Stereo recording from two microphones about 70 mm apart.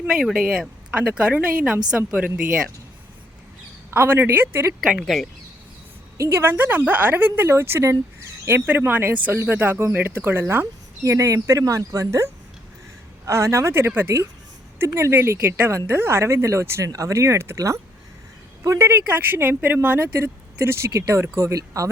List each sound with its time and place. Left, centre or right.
0.3 s speech: centre
3.9 s speech: right
4.9 s speech: centre
6.1 s speech: right
16.8 s speech: right
18.8 s speech: right